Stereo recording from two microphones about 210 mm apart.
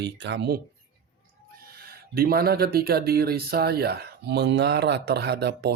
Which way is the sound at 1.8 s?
45° right (ahead or behind).